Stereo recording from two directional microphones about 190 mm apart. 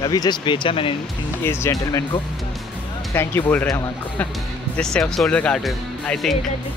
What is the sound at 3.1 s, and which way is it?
Speech, 15° left (ahead or behind).